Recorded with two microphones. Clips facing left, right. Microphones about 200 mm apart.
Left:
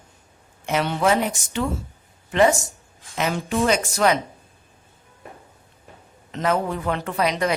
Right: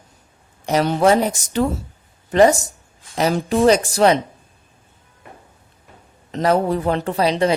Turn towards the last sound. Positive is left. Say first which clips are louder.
# right 5 dB
turn(degrees=-30)  # may be behind; listen again after turning